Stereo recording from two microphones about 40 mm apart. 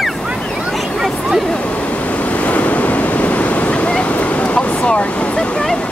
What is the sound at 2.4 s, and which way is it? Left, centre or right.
Waves, left.